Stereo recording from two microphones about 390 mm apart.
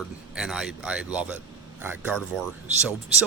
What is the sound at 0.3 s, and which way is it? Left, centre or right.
Speech, centre.